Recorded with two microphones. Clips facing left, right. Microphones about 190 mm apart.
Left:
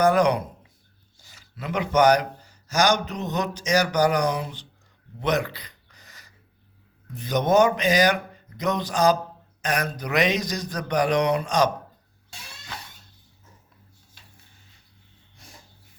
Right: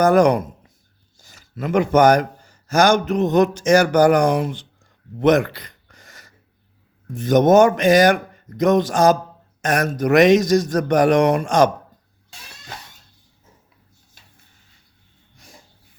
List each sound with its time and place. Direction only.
0.0 s a man's voice: 45° right (ahead or behind)
5.2 s a sound: 50° right (ahead or behind)
7.1 s speech: 45° right (ahead or behind)